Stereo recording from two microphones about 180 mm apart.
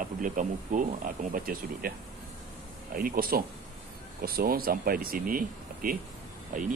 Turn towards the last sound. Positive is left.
turn(degrees=-50)  # may be behind; listen again after turning